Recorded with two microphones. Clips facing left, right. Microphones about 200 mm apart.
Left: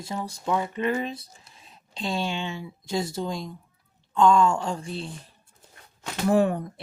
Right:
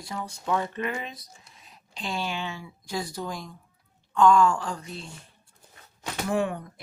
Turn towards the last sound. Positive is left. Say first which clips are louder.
# left 6 dB
turn(degrees=35)  # may be behind; listen again after turning